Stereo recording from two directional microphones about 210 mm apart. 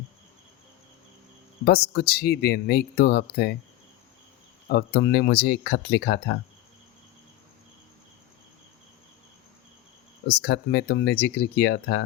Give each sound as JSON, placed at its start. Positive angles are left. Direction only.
{"t": 1.6, "sound": "speech", "side_deg": 50}
{"t": 4.7, "sound": "speech", "side_deg": 55}
{"t": 10.2, "sound": "speech", "side_deg": 50}